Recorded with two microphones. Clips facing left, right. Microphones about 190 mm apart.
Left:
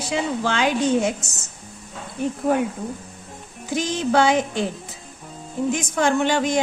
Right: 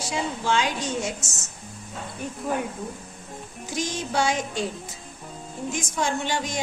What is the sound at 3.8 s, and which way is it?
Speech, 60° left (ahead or behind).